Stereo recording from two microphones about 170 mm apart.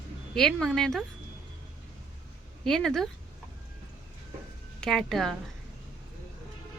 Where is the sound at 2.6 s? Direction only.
5° left (ahead or behind).